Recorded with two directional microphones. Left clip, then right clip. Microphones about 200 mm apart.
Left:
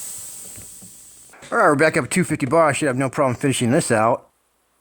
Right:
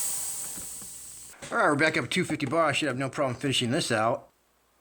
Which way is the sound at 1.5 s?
45° left (ahead or behind).